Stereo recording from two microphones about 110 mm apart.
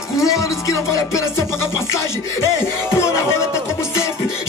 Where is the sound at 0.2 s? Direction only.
30° left (ahead or behind).